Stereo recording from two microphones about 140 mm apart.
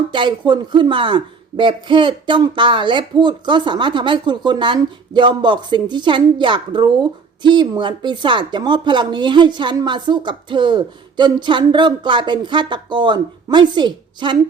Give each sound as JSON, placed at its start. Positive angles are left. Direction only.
{"t": 0.1, "sound": "speech", "side_deg": -35}